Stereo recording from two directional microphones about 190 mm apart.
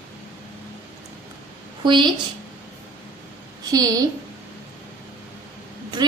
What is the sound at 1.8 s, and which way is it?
Speech, 25° right (ahead or behind).